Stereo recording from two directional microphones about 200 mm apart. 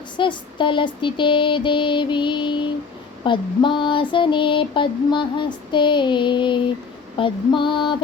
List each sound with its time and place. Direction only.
0.2 s female singing: 25° left (ahead or behind)